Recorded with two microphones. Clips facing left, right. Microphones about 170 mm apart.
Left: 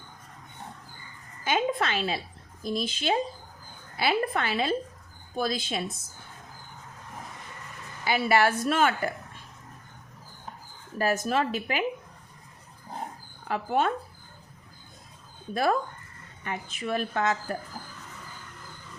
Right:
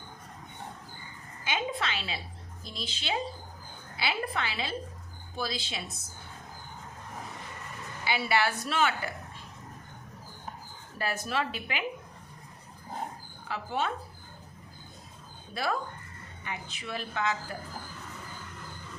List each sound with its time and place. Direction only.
1.5 s a woman's voice: 50° left (ahead or behind)
8.0 s a woman's voice: 45° left (ahead or behind)
10.9 s a woman's voice: 45° left (ahead or behind)
13.5 s a woman's voice: 50° left (ahead or behind)
15.5 s a woman's voice: 45° left (ahead or behind)